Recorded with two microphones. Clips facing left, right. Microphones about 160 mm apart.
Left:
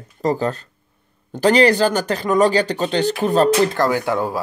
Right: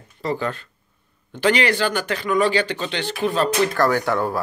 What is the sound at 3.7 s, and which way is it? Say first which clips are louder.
Speech: left 1 dB; 15° left (ahead or behind).